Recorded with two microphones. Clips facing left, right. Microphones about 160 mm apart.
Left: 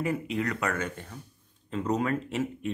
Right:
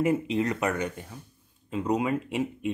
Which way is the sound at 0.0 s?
25° right (ahead or behind).